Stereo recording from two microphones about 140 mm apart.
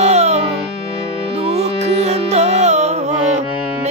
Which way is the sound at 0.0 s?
50° right (ahead or behind).